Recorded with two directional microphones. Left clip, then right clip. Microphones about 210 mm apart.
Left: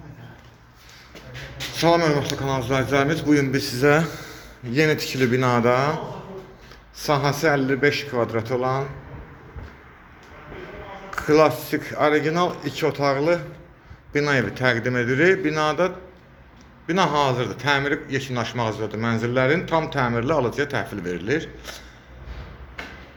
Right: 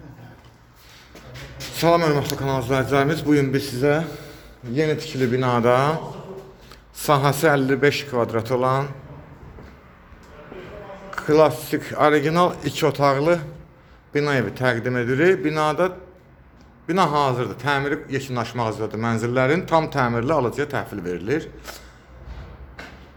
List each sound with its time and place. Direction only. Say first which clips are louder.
1.7 s a man's voice: right 1 dB; 5° right (ahead or behind)
11.1 s speech: right 1 dB; 5° right (ahead or behind)
14.1 s a man's voice: even; 5° right (ahead or behind)